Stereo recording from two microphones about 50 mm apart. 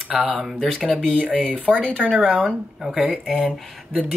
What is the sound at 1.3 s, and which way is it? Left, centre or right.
Speech, right.